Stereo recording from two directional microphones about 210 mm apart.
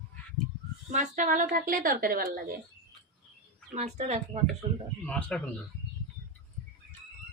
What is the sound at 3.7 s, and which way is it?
Speech, 30° right (ahead or behind).